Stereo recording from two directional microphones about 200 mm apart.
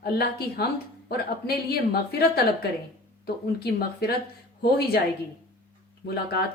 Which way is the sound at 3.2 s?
50° left (ahead or behind).